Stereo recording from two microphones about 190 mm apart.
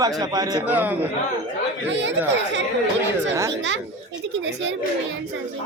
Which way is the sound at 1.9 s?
70° right (ahead or behind).